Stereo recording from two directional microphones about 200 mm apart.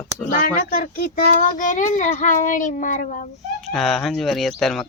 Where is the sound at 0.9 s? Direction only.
45° left (ahead or behind).